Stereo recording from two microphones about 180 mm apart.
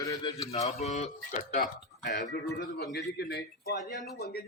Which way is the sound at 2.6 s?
65° left (ahead or behind).